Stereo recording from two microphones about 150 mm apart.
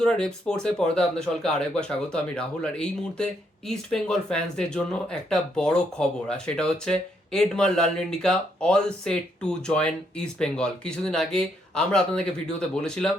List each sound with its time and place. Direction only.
0.0 s speech: 5° left (ahead or behind)